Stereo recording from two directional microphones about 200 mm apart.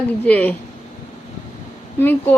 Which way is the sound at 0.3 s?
10° left (ahead or behind).